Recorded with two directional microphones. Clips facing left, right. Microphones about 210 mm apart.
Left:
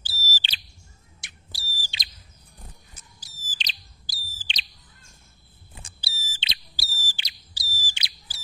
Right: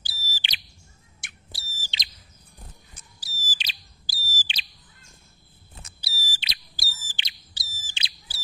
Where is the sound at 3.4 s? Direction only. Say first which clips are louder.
Right 1 dB; 5° right (ahead or behind).